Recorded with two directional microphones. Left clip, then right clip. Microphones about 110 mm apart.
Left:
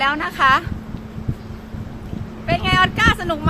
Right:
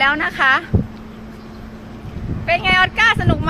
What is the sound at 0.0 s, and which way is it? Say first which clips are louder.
Speech: right 2 dB; 5° right (ahead or behind).